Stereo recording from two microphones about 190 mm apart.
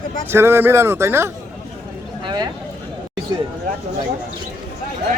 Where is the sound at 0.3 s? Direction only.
10° right (ahead or behind).